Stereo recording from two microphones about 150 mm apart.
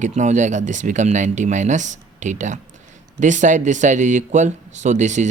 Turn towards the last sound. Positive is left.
turn(degrees=-55)  # may be behind; listen again after turning